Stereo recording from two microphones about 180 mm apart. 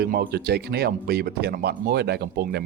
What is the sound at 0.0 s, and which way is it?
Speech, 60° right (ahead or behind).